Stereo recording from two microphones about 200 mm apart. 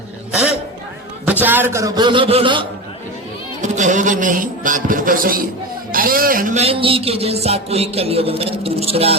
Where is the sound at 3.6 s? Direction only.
40° right (ahead or behind).